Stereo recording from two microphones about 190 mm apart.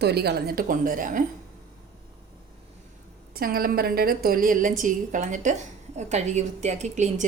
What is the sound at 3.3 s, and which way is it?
A woman's voice, 50° right (ahead or behind).